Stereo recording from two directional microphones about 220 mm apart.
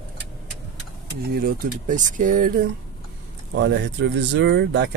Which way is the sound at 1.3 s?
40° right (ahead or behind).